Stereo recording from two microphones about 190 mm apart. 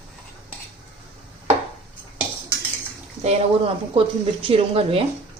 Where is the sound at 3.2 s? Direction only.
30° right (ahead or behind).